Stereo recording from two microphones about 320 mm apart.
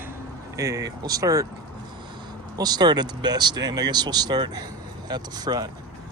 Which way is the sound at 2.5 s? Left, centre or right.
Centre.